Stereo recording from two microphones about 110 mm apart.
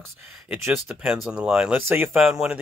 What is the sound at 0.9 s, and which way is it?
Speech, 5° right (ahead or behind).